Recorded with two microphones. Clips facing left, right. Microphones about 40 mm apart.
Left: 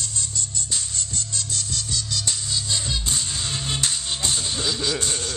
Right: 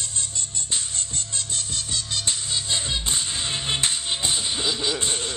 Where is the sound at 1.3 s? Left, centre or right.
Right.